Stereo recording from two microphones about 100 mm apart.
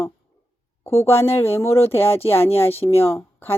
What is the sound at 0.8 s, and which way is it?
Speech, 25° left (ahead or behind).